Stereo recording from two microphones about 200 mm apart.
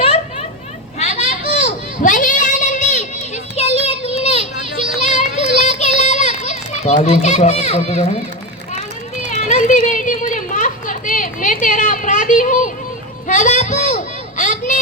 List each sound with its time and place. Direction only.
0.9 s children playing: 35° left (ahead or behind)
3.5 s child singing: 30° left (ahead or behind)
4.1 s children playing: 30° left (ahead or behind)
4.8 s a sound: 35° left (ahead or behind)
9.3 s a child's voice: 35° left (ahead or behind)
13.2 s child singing: 40° left (ahead or behind)